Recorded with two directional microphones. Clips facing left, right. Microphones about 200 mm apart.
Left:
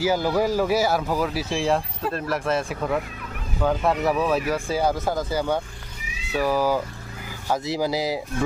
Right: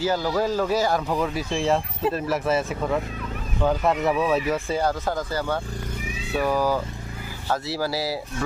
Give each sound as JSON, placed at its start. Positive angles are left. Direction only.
{"t": 0.0, "sound": "speech", "side_deg": 10}
{"t": 4.8, "sound": "speech", "side_deg": 10}